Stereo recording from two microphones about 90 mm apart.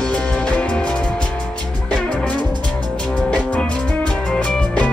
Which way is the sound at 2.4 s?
50° right (ahead or behind).